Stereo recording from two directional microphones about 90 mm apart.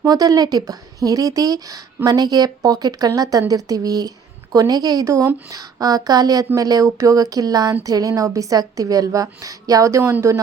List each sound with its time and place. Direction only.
0.0 s a woman's voice: 45° right (ahead or behind)